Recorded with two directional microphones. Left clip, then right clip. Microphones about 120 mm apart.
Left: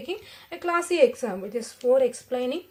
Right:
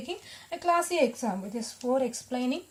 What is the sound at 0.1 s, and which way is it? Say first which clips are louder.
Speech: left 2 dB; 25° right (ahead or behind).